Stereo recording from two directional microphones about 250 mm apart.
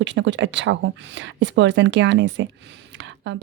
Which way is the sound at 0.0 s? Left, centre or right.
Right.